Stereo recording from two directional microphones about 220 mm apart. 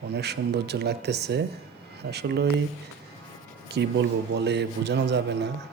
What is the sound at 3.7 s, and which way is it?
A man's voice, 50° right (ahead or behind).